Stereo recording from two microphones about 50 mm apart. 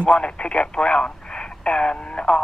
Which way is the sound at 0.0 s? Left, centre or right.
Left.